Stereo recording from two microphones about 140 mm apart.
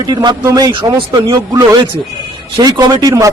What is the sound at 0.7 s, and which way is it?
Speech, 35° right (ahead or behind).